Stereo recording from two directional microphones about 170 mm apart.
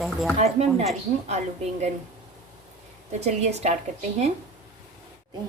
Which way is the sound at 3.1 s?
40° right (ahead or behind).